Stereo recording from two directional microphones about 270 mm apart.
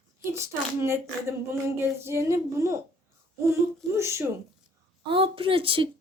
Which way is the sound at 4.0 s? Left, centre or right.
Centre.